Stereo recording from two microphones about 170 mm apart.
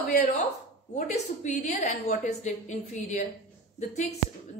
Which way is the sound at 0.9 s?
45° left (ahead or behind).